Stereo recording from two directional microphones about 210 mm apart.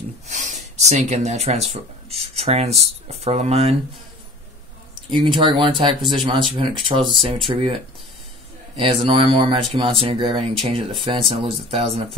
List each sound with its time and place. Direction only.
0.3 s a sound: 35° right (ahead or behind)
0.8 s speech: 30° right (ahead or behind)
5.1 s speech: 20° right (ahead or behind)